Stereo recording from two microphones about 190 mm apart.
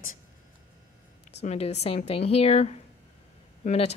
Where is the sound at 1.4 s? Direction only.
35° left (ahead or behind).